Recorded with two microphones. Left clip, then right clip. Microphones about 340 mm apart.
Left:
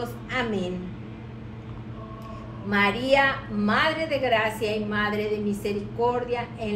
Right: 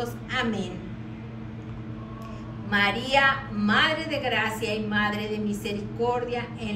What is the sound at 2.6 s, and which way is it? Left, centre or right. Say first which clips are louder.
A woman's voice: left 2 dB; centre.